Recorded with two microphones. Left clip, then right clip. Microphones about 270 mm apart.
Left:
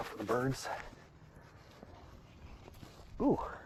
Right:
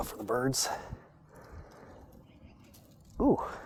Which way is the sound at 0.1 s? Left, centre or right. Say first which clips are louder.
Right 2 dB; right.